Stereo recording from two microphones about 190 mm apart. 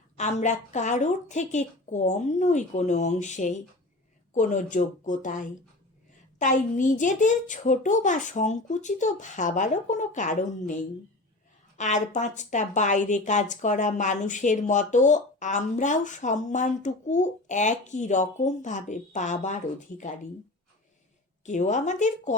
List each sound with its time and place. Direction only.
0.2 s speech: 40° left (ahead or behind)
11.8 s speech: 40° left (ahead or behind)
21.4 s speech: 40° left (ahead or behind)